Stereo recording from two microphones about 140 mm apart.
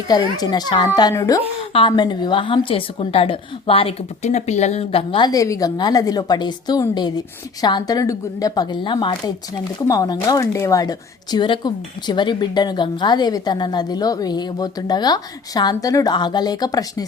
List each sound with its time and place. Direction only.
0.1 s a woman's voice: 30° left (ahead or behind)